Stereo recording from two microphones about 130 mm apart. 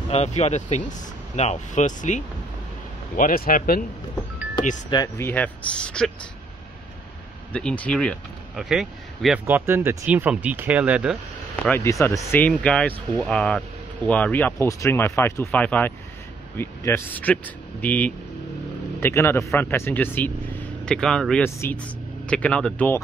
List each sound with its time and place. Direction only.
0.1 s speech: 55° left (ahead or behind)
3.2 s speech: 90° left
4.9 s speech: 30° left (ahead or behind)
5.2 s speech: 10° left (ahead or behind)
7.5 s speech: 10° left (ahead or behind)
9.5 s speech: 15° right (ahead or behind)
11.8 s speech: 25° left (ahead or behind)
20.8 s speech: 5° left (ahead or behind)